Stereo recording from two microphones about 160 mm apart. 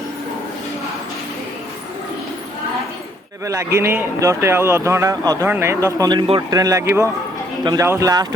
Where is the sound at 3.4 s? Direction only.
20° right (ahead or behind).